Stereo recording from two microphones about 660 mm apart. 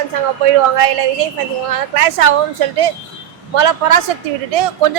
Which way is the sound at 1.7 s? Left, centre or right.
Right.